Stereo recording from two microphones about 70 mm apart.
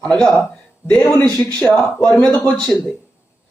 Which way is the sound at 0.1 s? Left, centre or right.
Centre.